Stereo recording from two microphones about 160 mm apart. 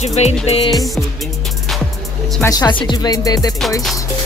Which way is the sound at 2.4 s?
25° left (ahead or behind).